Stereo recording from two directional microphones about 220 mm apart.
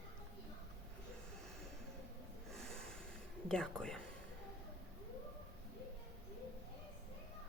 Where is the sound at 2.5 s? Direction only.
Centre (ahead or behind).